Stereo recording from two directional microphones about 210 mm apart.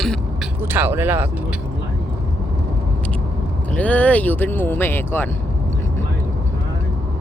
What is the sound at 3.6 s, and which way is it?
Speech, 5° left (ahead or behind).